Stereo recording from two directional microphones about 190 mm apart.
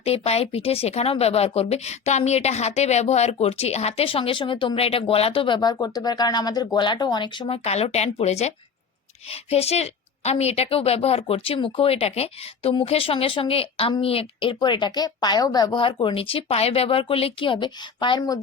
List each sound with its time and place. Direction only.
0.0 s a woman's voice: 30° left (ahead or behind)